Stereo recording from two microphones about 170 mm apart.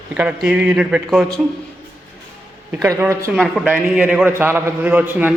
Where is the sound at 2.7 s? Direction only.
15° right (ahead or behind).